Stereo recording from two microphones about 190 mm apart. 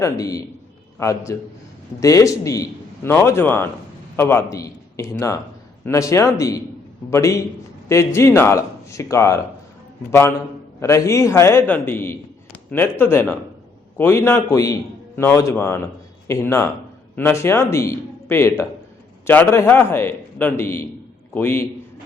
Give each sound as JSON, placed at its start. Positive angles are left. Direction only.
{"t": 0.0, "sound": "a man's voice", "side_deg": 15}